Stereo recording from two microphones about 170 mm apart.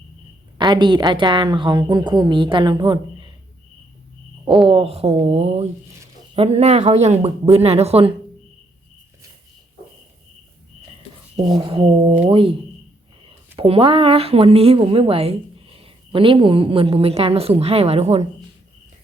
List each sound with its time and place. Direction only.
0.6 s a woman's voice: 25° right (ahead or behind)
4.7 s speech: 35° right (ahead or behind)
11.5 s a woman's voice: 30° right (ahead or behind)